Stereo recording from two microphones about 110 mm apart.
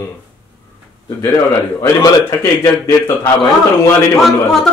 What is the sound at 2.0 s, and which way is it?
Speech, 30° left (ahead or behind).